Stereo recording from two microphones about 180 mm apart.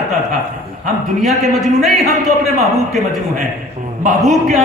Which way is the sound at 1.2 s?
Centre (ahead or behind).